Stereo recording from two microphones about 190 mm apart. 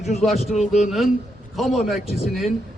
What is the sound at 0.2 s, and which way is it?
A man's voice, centre (ahead or behind).